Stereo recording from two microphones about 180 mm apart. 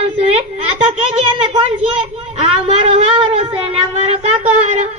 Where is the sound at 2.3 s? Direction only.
35° right (ahead or behind).